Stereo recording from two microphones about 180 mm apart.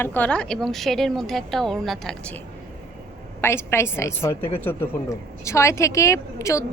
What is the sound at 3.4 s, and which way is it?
A woman's voice, 15° left (ahead or behind).